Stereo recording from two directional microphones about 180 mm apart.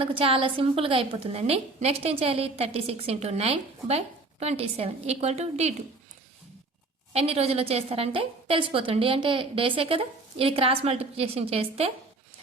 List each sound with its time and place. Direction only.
0.0 s a woman's voice: 30° right (ahead or behind)
7.1 s a woman's voice: 35° right (ahead or behind)